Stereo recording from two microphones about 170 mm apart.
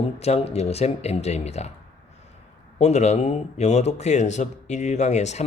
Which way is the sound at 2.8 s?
40° left (ahead or behind).